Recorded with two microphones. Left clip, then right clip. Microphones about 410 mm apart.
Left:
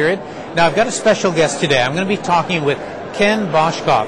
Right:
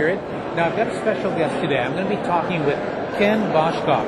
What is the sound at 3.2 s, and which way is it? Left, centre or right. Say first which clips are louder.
Speech: left 4 dB; left.